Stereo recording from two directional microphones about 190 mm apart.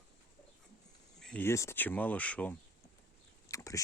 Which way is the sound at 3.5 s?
15° left (ahead or behind).